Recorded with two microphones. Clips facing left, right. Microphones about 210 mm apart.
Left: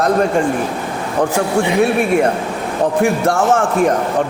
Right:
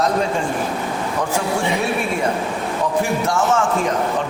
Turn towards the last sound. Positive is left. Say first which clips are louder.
# left 4 dB
turn(degrees=55)  # may be behind; listen again after turning